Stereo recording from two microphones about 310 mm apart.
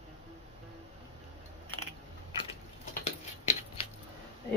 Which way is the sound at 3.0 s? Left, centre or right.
Centre.